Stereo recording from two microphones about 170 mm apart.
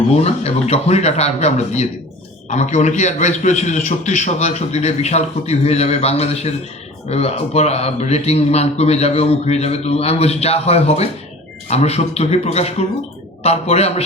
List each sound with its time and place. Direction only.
0.2 s speech: 40° left (ahead or behind)